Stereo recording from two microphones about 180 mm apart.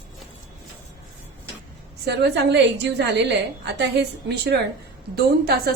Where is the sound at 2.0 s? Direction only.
70° right (ahead or behind).